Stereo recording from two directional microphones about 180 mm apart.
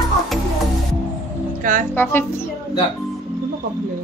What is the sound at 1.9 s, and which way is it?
Music, 10° left (ahead or behind).